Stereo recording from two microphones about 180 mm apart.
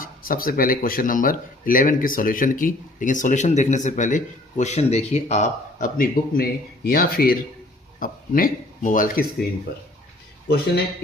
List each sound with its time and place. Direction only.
0.0 s speech: 50° left (ahead or behind)